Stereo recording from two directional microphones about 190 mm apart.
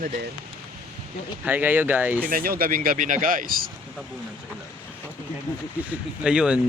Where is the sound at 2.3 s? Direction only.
50° right (ahead or behind).